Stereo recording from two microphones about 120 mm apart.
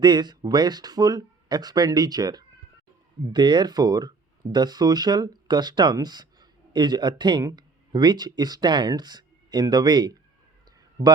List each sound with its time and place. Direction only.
0.0 s speech: 35° right (ahead or behind)